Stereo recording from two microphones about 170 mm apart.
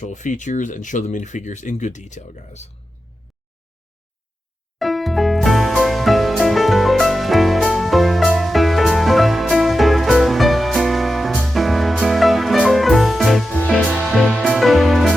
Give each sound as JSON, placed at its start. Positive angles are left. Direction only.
{"t": 0.0, "sound": "speech", "side_deg": 45}
{"t": 4.8, "sound": "music", "side_deg": 0}